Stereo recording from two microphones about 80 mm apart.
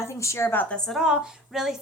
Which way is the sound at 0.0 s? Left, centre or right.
Left.